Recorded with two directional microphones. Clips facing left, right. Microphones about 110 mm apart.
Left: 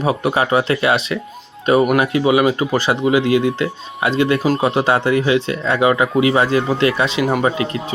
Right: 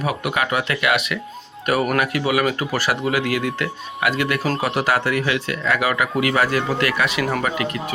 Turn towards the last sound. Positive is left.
turn(degrees=25)  # may be behind; listen again after turning